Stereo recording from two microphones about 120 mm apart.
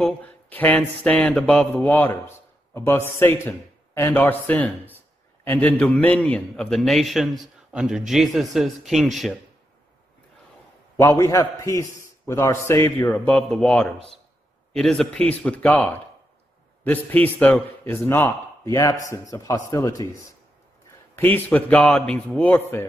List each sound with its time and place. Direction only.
0.0 s a man's voice: 15° left (ahead or behind)
11.0 s a man's voice: 25° left (ahead or behind)
18.6 s a man's voice: 30° left (ahead or behind)
21.2 s a man's voice: 15° left (ahead or behind)